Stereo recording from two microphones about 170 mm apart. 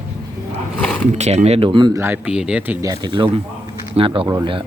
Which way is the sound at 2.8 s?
25° right (ahead or behind).